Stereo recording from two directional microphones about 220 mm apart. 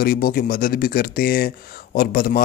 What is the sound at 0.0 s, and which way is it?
Speech, 40° left (ahead or behind).